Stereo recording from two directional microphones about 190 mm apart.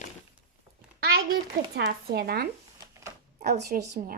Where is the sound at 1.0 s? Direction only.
55° right (ahead or behind).